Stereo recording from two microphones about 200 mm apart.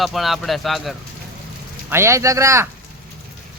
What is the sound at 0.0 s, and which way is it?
Speech, centre (ahead or behind).